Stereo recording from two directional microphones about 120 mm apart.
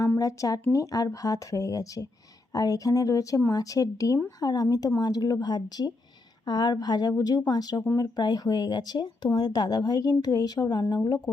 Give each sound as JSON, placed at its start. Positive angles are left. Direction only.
{"t": 0.2, "sound": "speech", "side_deg": 30}